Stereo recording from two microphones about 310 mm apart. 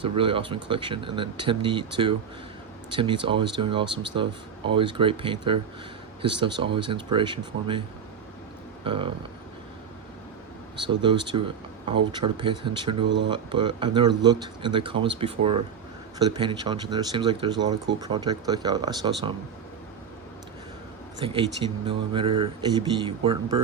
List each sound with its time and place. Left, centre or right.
0.0 s speech: centre
8.8 s speech: centre
10.8 s speech: centre
21.2 s speech: centre